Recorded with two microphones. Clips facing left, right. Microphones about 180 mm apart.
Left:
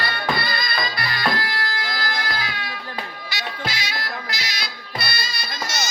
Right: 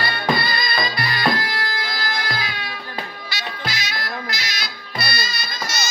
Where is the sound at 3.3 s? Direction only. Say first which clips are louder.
Left 1 dB; 25° left (ahead or behind).